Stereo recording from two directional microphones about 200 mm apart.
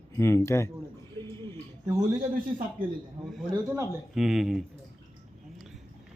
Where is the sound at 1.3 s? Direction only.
15° left (ahead or behind).